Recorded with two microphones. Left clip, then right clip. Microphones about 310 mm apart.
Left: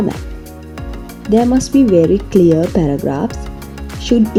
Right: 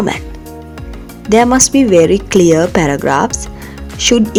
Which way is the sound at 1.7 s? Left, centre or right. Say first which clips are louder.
Even; right.